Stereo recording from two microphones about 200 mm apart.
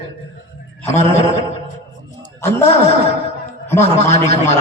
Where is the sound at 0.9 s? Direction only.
35° left (ahead or behind).